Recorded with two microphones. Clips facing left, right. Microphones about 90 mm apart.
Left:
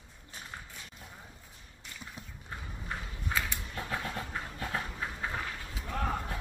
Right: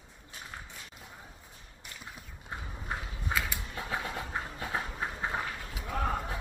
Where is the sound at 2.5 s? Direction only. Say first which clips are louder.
Right 2 dB; 20° right (ahead or behind).